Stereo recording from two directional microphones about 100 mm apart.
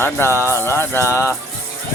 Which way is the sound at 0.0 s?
25° left (ahead or behind).